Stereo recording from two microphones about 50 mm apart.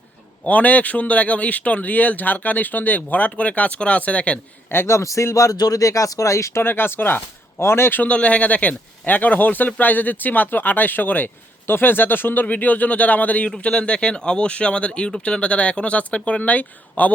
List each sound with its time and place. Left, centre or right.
0.4 s speech: left
4.7 s speech: left
4.9 s speech: left
6.6 s a man's voice: left
8.0 s speech: left
13.6 s speech: left